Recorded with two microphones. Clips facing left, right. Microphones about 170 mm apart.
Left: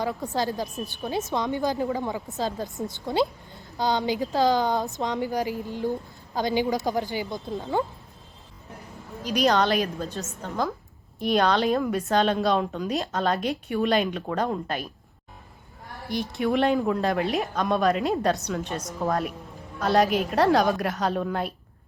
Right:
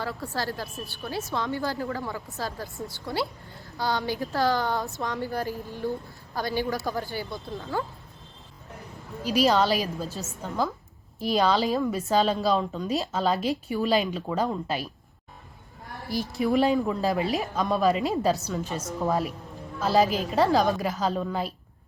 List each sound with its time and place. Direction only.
0.0 s a woman's voice: 20° left (ahead or behind)
9.2 s a woman's voice: 5° right (ahead or behind)
16.0 s a woman's voice: centre (ahead or behind)